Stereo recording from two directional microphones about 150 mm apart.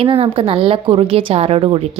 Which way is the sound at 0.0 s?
40° right (ahead or behind).